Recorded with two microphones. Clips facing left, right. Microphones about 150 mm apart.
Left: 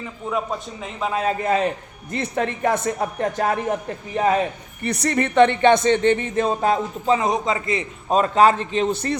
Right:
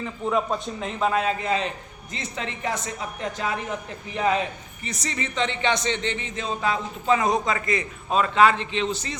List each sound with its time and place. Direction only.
0.0 s a man's voice: 5° left (ahead or behind)
1.2 s speech: 50° left (ahead or behind)
4.8 s speech: 60° left (ahead or behind)
7.1 s a man's voice: 20° left (ahead or behind)
8.1 s speech: 40° left (ahead or behind); by 9.1 s 55° left (ahead or behind)